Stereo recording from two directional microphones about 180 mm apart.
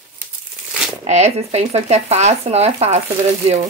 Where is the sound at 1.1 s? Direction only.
35° right (ahead or behind).